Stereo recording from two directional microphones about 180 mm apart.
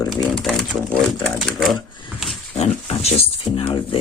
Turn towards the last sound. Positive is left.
turn(degrees=30)  # may be behind; listen again after turning